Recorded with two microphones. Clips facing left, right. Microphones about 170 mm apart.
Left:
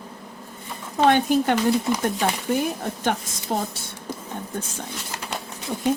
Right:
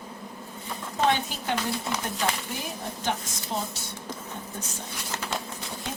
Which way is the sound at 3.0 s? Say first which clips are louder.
Left 3 dB; 55° left (ahead or behind).